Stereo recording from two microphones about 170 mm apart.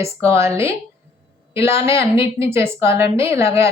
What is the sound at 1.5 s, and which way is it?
Speech, 15° right (ahead or behind).